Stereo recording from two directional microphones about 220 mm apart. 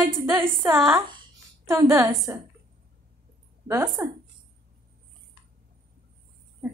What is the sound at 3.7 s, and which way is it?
Speech, 10° right (ahead or behind).